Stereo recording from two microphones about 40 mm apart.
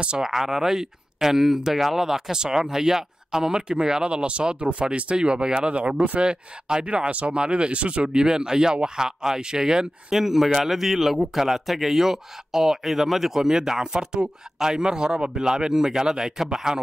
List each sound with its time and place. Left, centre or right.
0.2 s speech: centre
10.1 s speech: centre